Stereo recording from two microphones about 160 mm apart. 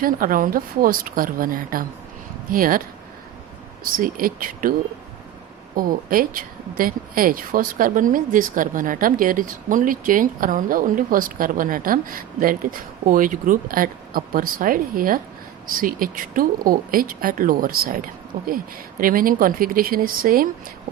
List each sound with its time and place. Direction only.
0.0 s speech: 60° right (ahead or behind)
3.8 s speech: 60° right (ahead or behind)
5.7 s speech: 60° right (ahead or behind)